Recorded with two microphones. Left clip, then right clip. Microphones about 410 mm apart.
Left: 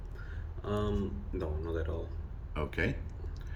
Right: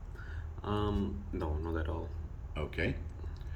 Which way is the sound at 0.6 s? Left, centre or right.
Centre.